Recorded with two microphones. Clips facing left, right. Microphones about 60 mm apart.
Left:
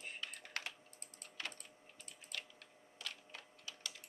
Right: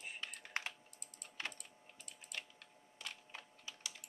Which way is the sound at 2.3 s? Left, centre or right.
Right.